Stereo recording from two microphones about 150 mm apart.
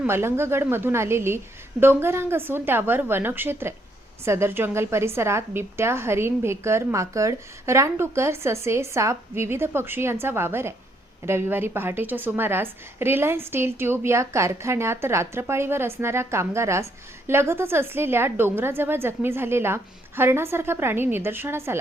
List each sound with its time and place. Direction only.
0.0 s a woman's voice: 15° right (ahead or behind)